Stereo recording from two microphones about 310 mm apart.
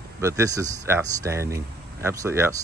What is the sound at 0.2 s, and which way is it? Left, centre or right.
Speech, centre.